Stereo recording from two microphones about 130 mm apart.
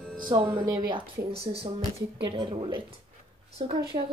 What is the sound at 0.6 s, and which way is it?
Speech, 30° right (ahead or behind).